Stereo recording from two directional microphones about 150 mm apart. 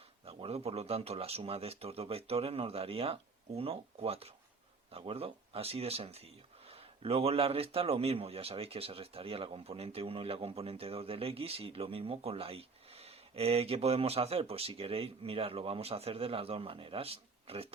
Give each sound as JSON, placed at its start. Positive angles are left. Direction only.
{"t": 0.3, "sound": "speech", "side_deg": -40}